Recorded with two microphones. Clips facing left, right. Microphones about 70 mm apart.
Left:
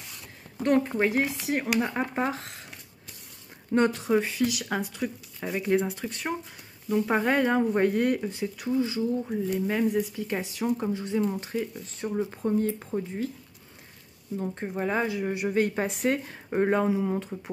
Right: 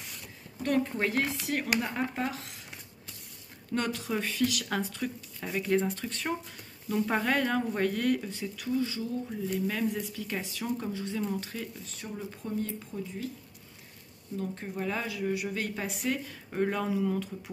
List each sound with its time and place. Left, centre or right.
0.6 s speech: left
3.7 s speech: left
14.3 s speech: left